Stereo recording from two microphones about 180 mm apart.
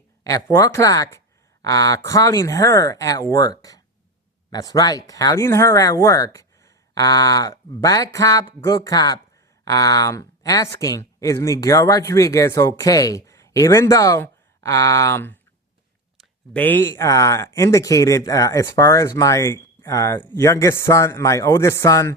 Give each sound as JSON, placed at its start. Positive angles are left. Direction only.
{"t": 0.3, "sound": "speech", "side_deg": 20}